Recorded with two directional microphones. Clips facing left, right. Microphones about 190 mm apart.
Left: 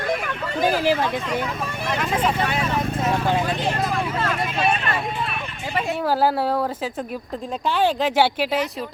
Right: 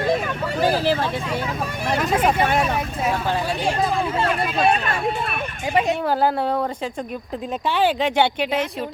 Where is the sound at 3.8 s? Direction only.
30° right (ahead or behind).